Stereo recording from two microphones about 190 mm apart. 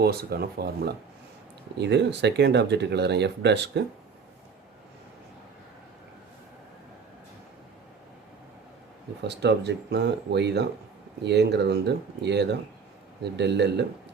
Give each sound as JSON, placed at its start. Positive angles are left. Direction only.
{"t": 0.0, "sound": "speech", "side_deg": -55}
{"t": 9.2, "sound": "speech", "side_deg": -65}